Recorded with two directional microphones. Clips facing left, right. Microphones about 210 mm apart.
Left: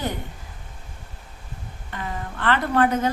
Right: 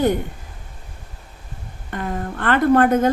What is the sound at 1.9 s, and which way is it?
A woman's voice, 50° right (ahead or behind).